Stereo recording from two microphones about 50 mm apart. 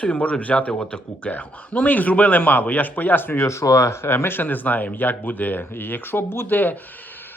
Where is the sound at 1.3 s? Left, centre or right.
Left.